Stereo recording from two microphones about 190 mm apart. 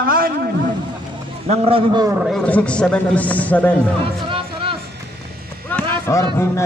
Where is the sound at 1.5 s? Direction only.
30° right (ahead or behind).